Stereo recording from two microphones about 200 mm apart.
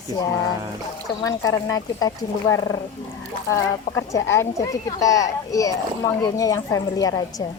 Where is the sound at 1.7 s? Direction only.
15° left (ahead or behind).